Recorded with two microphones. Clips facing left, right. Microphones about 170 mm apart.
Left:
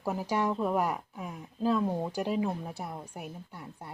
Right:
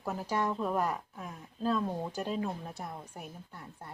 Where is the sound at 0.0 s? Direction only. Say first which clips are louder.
Left 3 dB; 10° left (ahead or behind).